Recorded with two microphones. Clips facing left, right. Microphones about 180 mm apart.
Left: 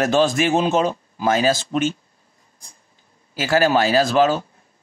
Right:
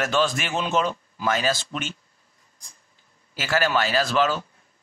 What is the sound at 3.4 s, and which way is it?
Speech, 40° left (ahead or behind).